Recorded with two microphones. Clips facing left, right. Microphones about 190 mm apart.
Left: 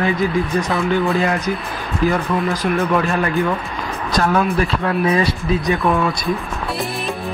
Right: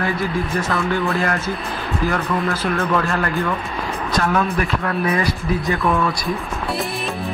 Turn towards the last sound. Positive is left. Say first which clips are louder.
# left 2 dB
turn(degrees=20)  # may be behind; listen again after turning